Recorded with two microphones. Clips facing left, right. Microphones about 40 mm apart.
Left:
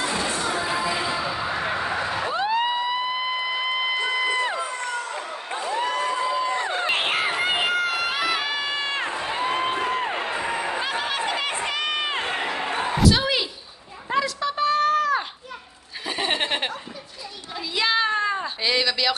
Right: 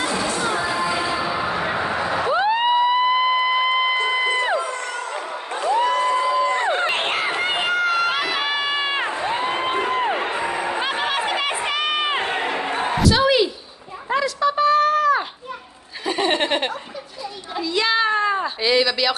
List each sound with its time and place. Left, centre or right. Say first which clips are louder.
0.4 s music: right 3 dB; right
0.8 s music: right 3 dB; centre
1.1 s a sound: right 3 dB; centre
4.8 s a sound: right 2 dB; centre
6.6 s crowd: right 5 dB; right
6.9 s crowd: right 1 dB; centre
7.4 s run: right 2 dB; centre
8.1 s crowd: right 2 dB; centre
8.5 s crowd: right 4 dB; right
9.7 s crowd: right 4 dB; right
13.0 s a sound: right 5 dB; centre
16.1 s laughter: right 5 dB; centre
17.6 s a sound: right 3 dB; centre